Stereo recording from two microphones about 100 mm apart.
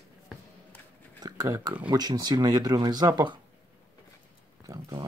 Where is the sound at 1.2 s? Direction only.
40° right (ahead or behind).